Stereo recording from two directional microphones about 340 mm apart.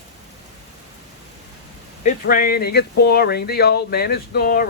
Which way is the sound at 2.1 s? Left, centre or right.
Left.